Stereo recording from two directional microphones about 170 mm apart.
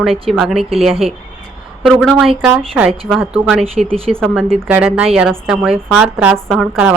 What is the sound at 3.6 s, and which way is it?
Speech, 35° right (ahead or behind).